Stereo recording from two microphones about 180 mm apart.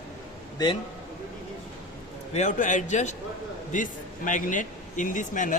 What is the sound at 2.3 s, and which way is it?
Speech, 45° left (ahead or behind).